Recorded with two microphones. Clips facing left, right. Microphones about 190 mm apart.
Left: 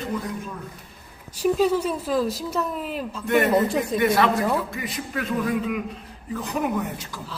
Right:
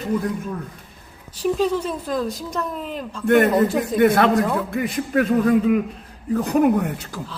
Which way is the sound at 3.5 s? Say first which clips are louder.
Right 2 dB; centre (ahead or behind).